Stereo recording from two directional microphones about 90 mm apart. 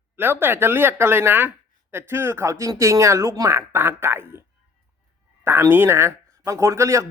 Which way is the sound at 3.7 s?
25° right (ahead or behind).